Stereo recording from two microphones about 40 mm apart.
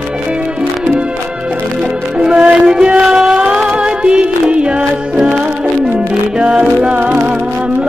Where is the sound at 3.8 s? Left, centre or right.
Right.